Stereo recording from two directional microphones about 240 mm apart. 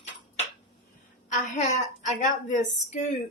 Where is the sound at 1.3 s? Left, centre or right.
Left.